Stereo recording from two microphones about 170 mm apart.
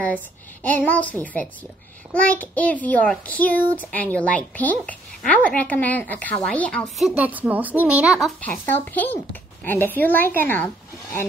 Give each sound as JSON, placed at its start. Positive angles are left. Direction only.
{"t": 0.7, "sound": "a woman's voice", "side_deg": 10}
{"t": 8.4, "sound": "a woman's voice", "side_deg": 10}